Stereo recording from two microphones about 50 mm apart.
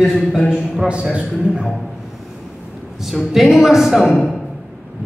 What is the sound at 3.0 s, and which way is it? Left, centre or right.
Speech, centre.